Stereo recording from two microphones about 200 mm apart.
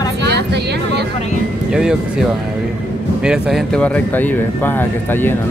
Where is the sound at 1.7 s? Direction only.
5° right (ahead or behind).